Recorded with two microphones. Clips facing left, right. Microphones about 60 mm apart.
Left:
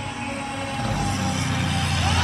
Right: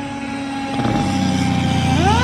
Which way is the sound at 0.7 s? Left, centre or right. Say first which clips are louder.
Right 9 dB; right.